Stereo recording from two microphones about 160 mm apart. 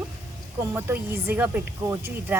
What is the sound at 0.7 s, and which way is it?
Speech, 15° right (ahead or behind).